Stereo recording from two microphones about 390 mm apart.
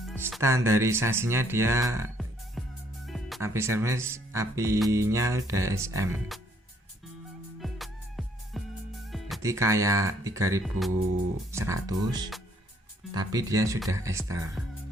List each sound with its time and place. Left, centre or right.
0.0 s speech: centre
7.6 s music: centre
9.3 s speech: centre